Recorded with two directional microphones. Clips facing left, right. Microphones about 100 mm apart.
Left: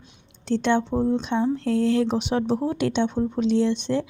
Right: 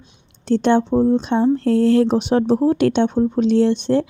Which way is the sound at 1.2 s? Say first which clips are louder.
Right 6 dB; 50° right (ahead or behind).